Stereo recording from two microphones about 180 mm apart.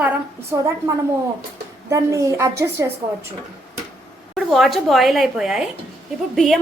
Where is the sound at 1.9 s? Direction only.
15° right (ahead or behind).